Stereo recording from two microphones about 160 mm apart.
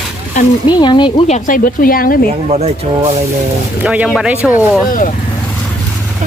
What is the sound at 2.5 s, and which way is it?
Speech, 45° right (ahead or behind).